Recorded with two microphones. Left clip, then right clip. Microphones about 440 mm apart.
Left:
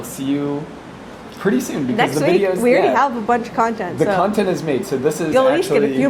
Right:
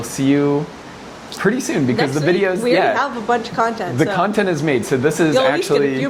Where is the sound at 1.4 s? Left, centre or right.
Right.